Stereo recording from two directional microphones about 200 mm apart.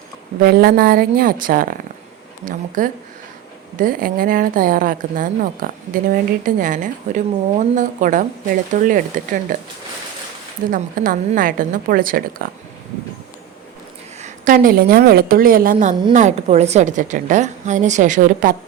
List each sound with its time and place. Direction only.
0.4 s a woman's voice: 50° right (ahead or behind)
10.7 s a woman's voice: 45° right (ahead or behind)
14.2 s a woman's voice: 40° right (ahead or behind)